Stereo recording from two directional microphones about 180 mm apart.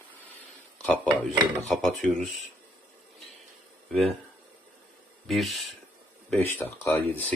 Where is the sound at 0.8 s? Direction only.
10° left (ahead or behind).